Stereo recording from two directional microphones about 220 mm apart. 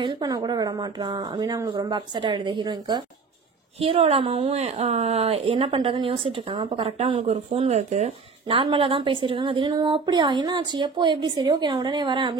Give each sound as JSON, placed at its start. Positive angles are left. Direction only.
{"t": 0.0, "sound": "a woman's voice", "side_deg": -20}